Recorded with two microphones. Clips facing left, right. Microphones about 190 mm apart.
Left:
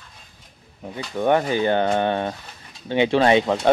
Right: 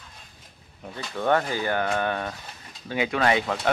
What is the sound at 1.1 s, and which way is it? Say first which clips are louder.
Speech: left 4 dB; 15° left (ahead or behind).